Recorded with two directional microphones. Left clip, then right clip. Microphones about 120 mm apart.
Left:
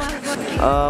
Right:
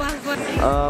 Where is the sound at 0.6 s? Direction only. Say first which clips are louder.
Left 3 dB; 15° left (ahead or behind).